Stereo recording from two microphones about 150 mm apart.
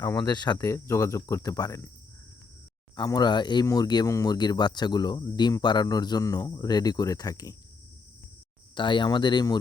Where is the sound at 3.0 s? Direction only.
30° left (ahead or behind).